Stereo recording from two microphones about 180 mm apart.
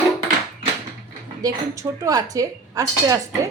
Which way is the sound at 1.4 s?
20° right (ahead or behind).